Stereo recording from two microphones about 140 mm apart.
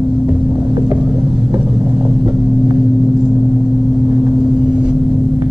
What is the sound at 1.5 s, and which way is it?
Vehicle, 30° right (ahead or behind).